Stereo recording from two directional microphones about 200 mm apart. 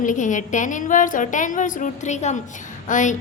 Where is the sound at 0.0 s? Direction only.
40° left (ahead or behind).